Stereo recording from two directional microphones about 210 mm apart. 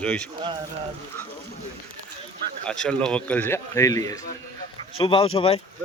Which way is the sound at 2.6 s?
5° left (ahead or behind).